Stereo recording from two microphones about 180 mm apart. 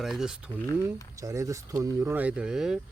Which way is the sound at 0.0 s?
Centre (ahead or behind).